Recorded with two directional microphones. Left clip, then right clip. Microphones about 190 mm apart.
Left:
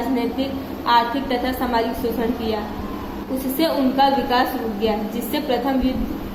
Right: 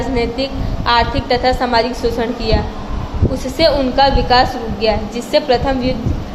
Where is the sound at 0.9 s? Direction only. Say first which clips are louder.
Right 4 dB; 15° right (ahead or behind).